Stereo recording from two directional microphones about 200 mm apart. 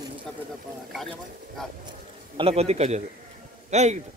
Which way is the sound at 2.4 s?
30° right (ahead or behind).